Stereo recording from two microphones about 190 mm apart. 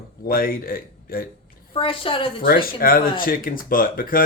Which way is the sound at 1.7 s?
30° left (ahead or behind).